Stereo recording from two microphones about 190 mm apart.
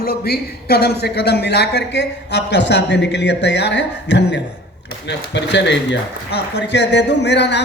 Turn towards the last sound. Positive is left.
turn(degrees=65)  # may be behind; listen again after turning